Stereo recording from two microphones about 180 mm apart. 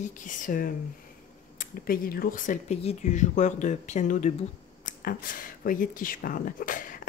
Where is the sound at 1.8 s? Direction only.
55° left (ahead or behind).